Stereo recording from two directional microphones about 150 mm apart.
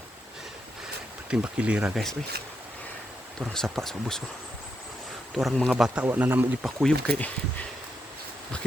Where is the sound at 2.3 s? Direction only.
90° right.